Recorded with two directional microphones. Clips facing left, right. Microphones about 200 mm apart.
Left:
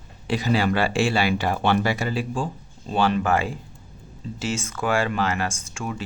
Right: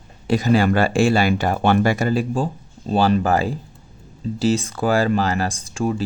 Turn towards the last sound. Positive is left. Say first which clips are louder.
# right 9 dB
turn(degrees=-35)  # may be behind; listen again after turning